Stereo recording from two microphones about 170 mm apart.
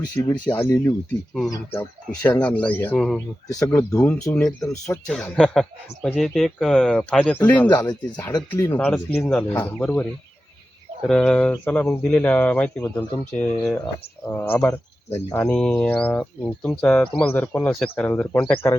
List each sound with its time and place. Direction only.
0.2 s speech: 20° left (ahead or behind)
3.5 s speech: 15° left (ahead or behind)
5.0 s speech: 5° left (ahead or behind)
7.7 s speech: 20° left (ahead or behind); by 18.5 s 5° left (ahead or behind)